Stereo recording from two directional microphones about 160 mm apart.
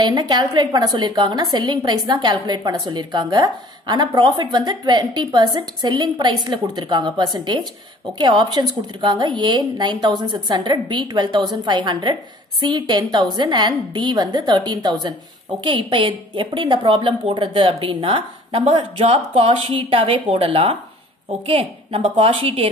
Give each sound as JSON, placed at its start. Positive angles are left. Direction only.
{"t": 0.0, "sound": "a woman's voice", "side_deg": -25}